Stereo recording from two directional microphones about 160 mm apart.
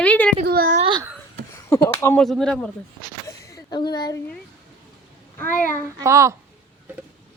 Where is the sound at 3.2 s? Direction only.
20° left (ahead or behind).